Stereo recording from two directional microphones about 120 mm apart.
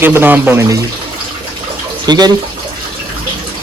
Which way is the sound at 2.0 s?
35° right (ahead or behind).